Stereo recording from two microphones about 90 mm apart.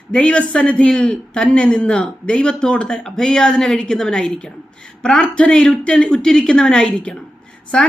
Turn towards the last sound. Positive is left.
turn(degrees=10)  # may be behind; listen again after turning